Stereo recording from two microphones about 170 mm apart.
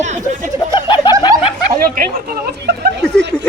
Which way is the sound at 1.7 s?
55° right (ahead or behind).